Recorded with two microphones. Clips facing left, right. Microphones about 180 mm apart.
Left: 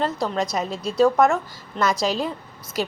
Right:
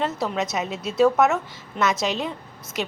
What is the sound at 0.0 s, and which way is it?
A woman's voice, 5° right (ahead or behind).